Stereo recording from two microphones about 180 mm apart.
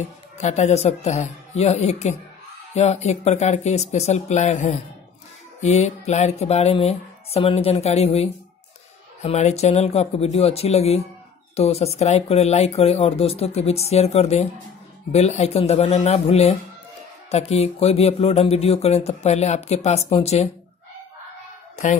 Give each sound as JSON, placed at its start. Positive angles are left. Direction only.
{"t": 0.4, "sound": "speech", "side_deg": 40}